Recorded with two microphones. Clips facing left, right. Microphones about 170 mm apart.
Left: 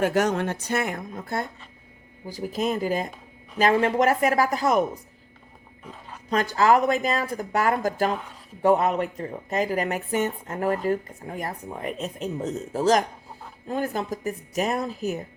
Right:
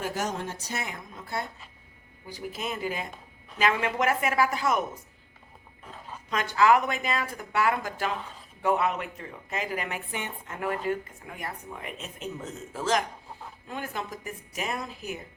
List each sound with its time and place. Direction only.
0.0 s a woman's voice: 65° left (ahead or behind); by 4.8 s 40° left (ahead or behind)
6.3 s speech: 40° left (ahead or behind)